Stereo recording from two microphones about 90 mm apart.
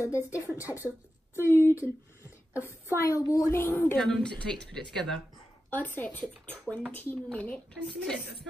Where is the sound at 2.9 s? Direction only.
35° left (ahead or behind).